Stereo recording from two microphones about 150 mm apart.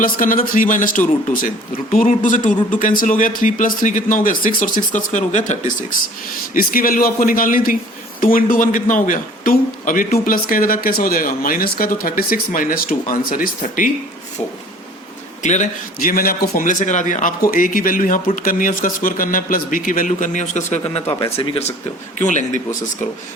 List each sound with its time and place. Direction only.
0.0 s speech: 65° left (ahead or behind)
6.5 s a man's voice: 70° left (ahead or behind)
15.4 s a man's voice: 50° left (ahead or behind)
16.0 s a man's voice: 75° left (ahead or behind); by 21.7 s 40° left (ahead or behind)
22.2 s speech: 55° left (ahead or behind)